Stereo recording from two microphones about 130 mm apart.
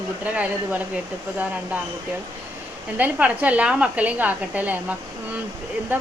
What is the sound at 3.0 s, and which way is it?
A woman's voice, 10° right (ahead or behind).